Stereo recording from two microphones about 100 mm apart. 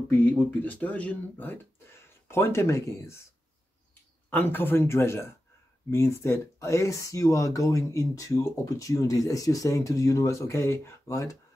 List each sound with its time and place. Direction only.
0.1 s speech: 20° left (ahead or behind)
4.3 s speech: 20° left (ahead or behind)